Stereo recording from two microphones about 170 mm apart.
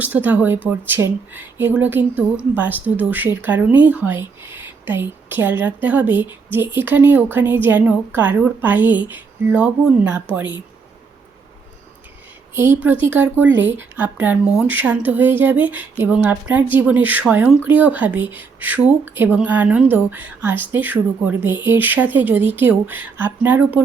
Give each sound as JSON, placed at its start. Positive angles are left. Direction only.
{"t": 0.0, "sound": "speech", "side_deg": -10}
{"t": 12.5, "sound": "speech", "side_deg": -15}